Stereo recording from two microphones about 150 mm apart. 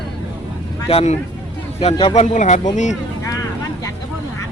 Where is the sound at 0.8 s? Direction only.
45° left (ahead or behind).